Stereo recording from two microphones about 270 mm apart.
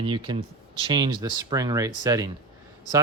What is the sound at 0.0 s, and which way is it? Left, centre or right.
Speech, centre.